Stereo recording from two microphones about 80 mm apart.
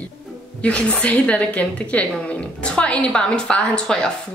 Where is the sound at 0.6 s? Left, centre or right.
Centre.